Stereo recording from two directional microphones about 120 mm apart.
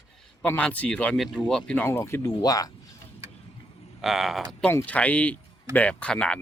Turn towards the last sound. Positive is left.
turn(degrees=10)  # may be behind; listen again after turning